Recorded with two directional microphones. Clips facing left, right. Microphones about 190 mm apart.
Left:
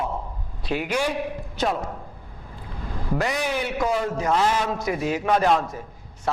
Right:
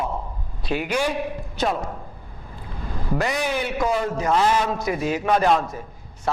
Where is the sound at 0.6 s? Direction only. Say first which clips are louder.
Right 1 dB; 15° right (ahead or behind).